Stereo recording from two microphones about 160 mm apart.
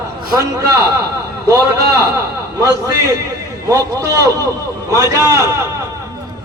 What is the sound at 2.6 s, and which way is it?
A man's voice, 20° right (ahead or behind).